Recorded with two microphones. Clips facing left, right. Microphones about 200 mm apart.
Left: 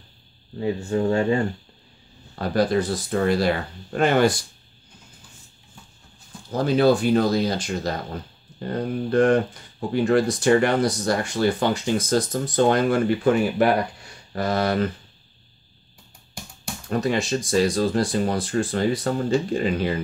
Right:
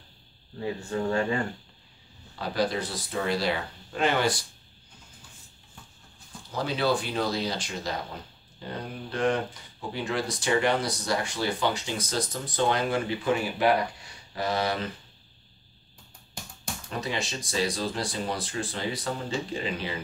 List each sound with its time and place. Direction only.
0.6 s speech: 25° left (ahead or behind)
2.3 s speech: 50° left (ahead or behind)
6.5 s speech: 45° left (ahead or behind)
16.9 s speech: 50° left (ahead or behind)